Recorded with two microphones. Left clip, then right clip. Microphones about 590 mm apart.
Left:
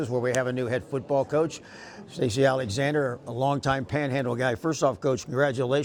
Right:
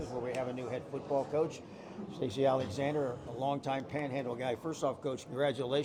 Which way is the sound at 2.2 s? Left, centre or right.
Left.